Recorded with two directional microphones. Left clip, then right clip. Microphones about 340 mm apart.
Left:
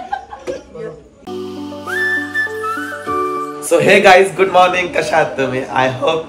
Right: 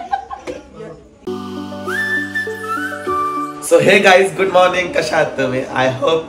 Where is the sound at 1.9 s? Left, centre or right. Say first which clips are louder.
Left 2 dB; centre.